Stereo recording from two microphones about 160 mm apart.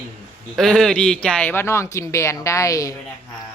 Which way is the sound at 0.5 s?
Centre (ahead or behind).